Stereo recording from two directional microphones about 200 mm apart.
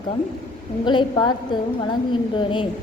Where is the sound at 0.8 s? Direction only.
25° left (ahead or behind).